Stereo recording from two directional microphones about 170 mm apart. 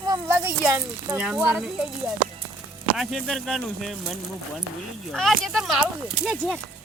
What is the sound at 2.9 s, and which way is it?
Speech, centre (ahead or behind).